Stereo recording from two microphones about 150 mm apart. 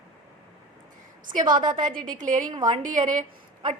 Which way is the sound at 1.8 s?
60° right (ahead or behind).